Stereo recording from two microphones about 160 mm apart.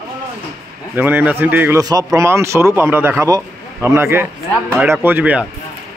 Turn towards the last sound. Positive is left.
turn(degrees=-10)  # may be behind; listen again after turning